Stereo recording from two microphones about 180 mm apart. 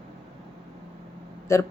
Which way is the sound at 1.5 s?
15° left (ahead or behind).